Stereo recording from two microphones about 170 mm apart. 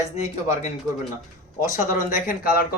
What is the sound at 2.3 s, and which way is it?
Speech, 60° left (ahead or behind).